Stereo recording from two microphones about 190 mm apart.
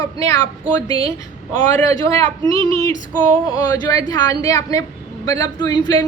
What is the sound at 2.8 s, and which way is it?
A woman's voice, 15° left (ahead or behind).